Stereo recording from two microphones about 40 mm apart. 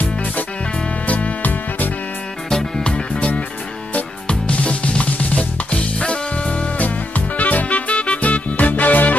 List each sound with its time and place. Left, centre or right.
1.0 s music: left
2.8 s music: left